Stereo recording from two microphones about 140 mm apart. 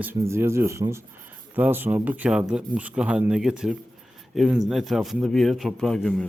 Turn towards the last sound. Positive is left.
turn(degrees=5)  # may be behind; listen again after turning